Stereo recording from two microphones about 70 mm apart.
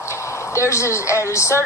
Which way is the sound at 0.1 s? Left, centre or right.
Left.